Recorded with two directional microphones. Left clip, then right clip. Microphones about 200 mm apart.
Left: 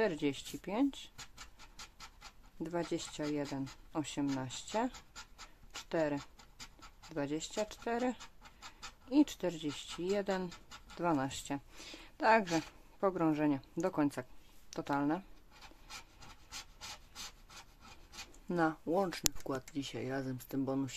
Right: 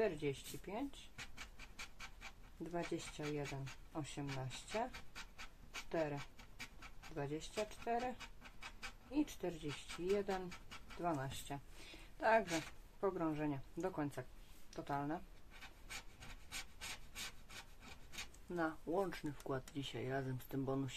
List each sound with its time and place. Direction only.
0.0 s speech: 45° left (ahead or behind)
2.6 s speech: 40° left (ahead or behind)
5.9 s speech: 45° left (ahead or behind)
7.2 s speech: 40° left (ahead or behind)
18.5 s speech: 40° left (ahead or behind)